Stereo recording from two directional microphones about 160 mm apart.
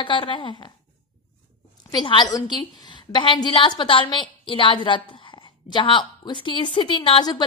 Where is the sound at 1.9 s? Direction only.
30° left (ahead or behind).